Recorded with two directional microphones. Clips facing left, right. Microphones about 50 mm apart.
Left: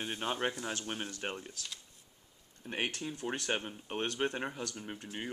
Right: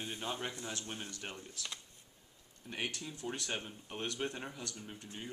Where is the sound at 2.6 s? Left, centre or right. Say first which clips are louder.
Left 4 dB; left.